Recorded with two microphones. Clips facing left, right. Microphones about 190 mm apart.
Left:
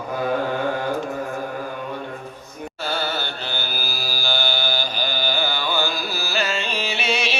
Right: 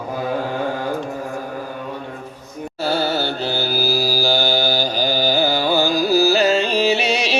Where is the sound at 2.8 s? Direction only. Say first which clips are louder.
Right 7 dB; 40° right (ahead or behind).